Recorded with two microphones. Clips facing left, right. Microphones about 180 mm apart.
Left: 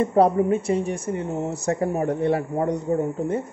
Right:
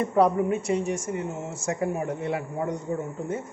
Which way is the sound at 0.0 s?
30° left (ahead or behind).